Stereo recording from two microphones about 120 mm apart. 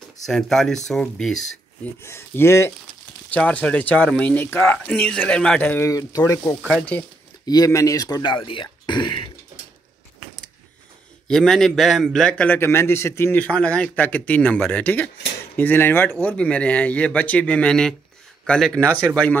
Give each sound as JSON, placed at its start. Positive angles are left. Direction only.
{"t": 0.2, "sound": "speech", "side_deg": 0}
{"t": 2.0, "sound": "speech", "side_deg": 20}
{"t": 3.3, "sound": "a man's voice", "side_deg": 10}
{"t": 5.9, "sound": "speech", "side_deg": 30}
{"t": 6.7, "sound": "a man's voice", "side_deg": 10}
{"t": 7.4, "sound": "speech", "side_deg": 30}
{"t": 11.2, "sound": "a man's voice", "side_deg": 5}
{"t": 18.9, "sound": "speech", "side_deg": -15}